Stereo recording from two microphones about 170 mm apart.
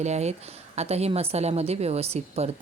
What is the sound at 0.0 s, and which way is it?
Speech, 40° right (ahead or behind).